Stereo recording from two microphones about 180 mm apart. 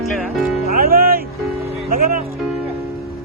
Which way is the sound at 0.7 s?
55° right (ahead or behind).